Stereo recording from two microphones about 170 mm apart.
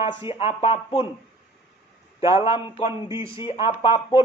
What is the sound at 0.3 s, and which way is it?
Speech, 35° left (ahead or behind).